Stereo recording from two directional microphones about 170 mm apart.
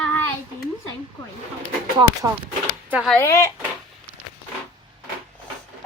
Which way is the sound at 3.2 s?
15° left (ahead or behind).